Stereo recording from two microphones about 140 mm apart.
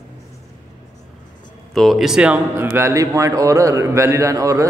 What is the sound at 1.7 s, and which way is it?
A man's voice, centre (ahead or behind).